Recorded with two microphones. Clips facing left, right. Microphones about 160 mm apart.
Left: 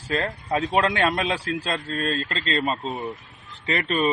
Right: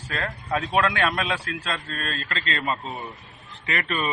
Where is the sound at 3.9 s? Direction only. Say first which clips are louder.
Left 6 dB; 30° left (ahead or behind).